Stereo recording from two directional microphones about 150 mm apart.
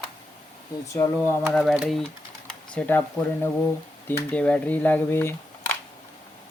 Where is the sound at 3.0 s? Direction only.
20° left (ahead or behind).